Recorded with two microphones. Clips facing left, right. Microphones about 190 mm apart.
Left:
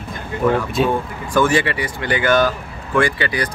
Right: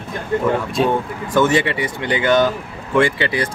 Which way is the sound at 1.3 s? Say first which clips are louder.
Right 1 dB; 20° right (ahead or behind).